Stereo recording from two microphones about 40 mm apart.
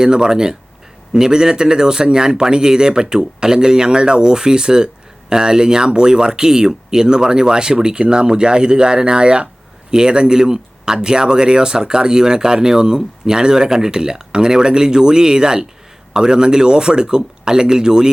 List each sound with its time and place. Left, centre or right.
0.0 s speech: centre